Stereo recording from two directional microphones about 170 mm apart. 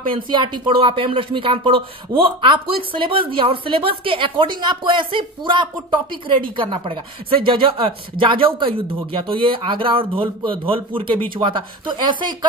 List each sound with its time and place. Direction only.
0.1 s a woman's voice: 30° right (ahead or behind)